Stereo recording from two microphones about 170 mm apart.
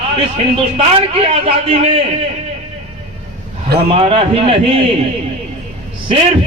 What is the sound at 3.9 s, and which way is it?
Speech, 35° right (ahead or behind).